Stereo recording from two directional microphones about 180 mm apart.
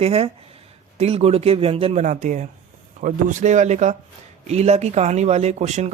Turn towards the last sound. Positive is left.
turn(degrees=-40)  # may be behind; listen again after turning